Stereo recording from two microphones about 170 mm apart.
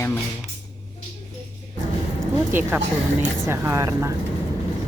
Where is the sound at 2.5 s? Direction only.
15° right (ahead or behind).